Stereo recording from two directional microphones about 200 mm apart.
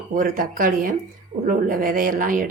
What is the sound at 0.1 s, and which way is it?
Speech, 45° right (ahead or behind).